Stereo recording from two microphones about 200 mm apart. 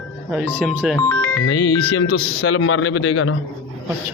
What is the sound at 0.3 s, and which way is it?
Speech, centre (ahead or behind).